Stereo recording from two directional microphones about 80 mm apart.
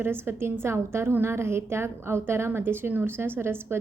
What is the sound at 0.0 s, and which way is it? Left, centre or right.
A woman's voice, right.